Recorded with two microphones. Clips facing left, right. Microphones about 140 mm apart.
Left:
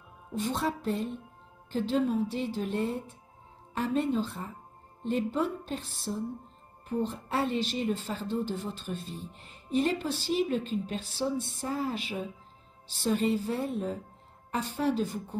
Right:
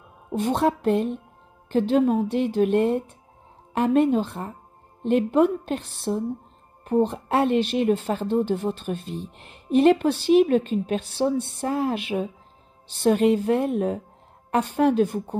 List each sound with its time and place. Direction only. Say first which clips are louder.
0.3 s a woman's voice: right 9 dB; 60° right (ahead or behind)